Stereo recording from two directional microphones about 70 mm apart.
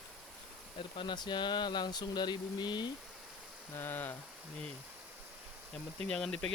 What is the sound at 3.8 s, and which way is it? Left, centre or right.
Rain, left.